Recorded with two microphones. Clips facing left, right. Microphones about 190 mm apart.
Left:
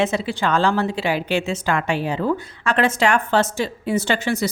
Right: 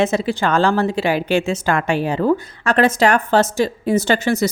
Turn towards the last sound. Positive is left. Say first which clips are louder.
# right 4 dB
turn(degrees=-45)  # may be behind; listen again after turning